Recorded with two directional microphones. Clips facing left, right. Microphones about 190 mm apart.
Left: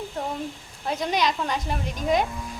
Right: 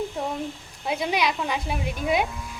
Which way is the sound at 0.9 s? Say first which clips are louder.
Even; 10° right (ahead or behind).